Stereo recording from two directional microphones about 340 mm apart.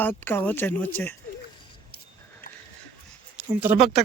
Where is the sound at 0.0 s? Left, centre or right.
Centre.